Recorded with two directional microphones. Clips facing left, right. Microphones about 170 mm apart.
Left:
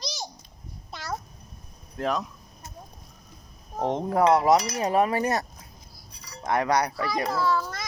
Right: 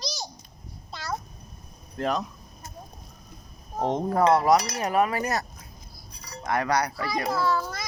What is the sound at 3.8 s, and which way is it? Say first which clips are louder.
Speech: right 1 dB; 5° right (ahead or behind).